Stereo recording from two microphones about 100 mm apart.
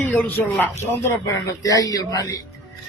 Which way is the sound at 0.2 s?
20° left (ahead or behind).